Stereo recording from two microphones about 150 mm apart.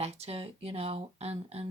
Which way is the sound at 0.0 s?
45° right (ahead or behind).